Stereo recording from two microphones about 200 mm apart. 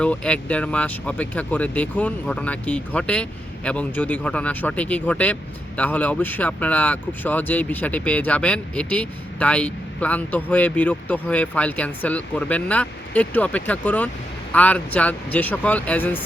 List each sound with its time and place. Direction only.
0.0 s speech: 5° left (ahead or behind)